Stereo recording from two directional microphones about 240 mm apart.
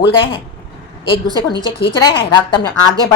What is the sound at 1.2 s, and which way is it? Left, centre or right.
Speech, centre.